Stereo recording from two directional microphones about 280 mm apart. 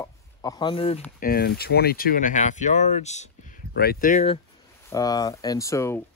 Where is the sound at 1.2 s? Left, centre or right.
Left.